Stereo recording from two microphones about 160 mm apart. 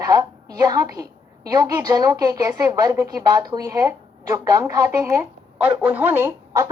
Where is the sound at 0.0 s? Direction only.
20° right (ahead or behind).